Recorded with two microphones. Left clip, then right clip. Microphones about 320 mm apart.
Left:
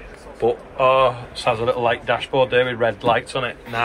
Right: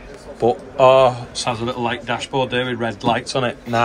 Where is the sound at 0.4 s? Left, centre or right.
Centre.